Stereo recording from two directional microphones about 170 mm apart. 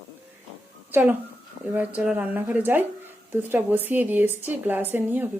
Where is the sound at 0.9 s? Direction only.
10° right (ahead or behind).